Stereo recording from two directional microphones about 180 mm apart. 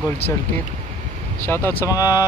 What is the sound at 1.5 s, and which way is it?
Speech, 10° left (ahead or behind).